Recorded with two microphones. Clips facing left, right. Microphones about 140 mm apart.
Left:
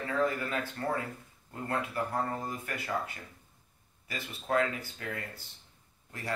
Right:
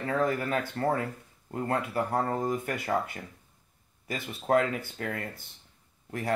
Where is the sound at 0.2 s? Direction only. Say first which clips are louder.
Right 1 dB; 40° right (ahead or behind).